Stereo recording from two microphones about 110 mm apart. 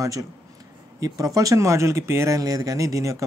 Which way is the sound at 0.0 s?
30° right (ahead or behind).